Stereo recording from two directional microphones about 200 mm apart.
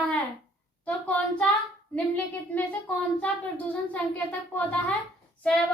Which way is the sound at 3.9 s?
10° left (ahead or behind).